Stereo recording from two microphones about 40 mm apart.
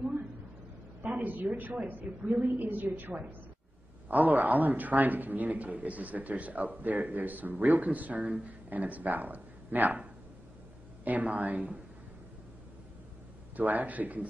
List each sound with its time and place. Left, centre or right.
1.2 s a man's voice: right
2.6 s a man's voice: right
4.1 s a man's voice: right
11.1 s speech: right
13.6 s a man's voice: right